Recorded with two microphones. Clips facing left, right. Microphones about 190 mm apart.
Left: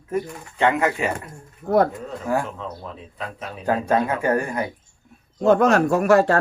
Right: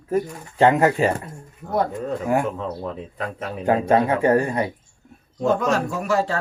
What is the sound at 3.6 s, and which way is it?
Speech, 25° right (ahead or behind).